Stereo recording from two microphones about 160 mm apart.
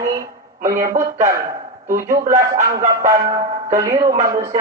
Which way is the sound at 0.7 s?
20° right (ahead or behind).